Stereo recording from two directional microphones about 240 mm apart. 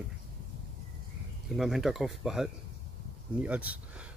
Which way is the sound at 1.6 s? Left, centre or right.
Centre.